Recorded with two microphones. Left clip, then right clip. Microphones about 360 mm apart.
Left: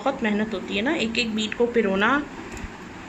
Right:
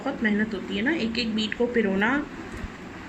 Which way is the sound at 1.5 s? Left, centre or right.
Centre.